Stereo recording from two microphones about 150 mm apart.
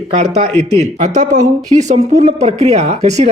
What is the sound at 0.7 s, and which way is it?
A woman's voice, 50° right (ahead or behind).